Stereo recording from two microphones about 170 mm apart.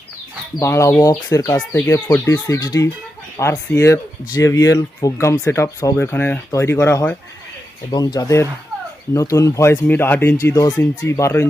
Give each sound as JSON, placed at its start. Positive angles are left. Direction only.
{"t": 0.6, "sound": "speech", "side_deg": 15}
{"t": 7.9, "sound": "speech", "side_deg": 25}